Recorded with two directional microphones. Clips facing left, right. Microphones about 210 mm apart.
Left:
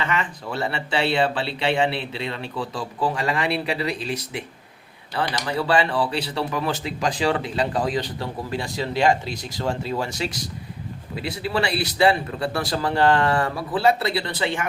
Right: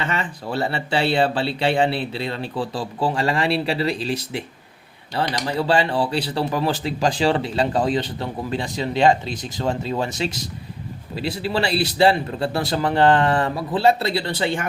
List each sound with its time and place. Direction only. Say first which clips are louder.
0.0 s speech: even; 30° right (ahead or behind)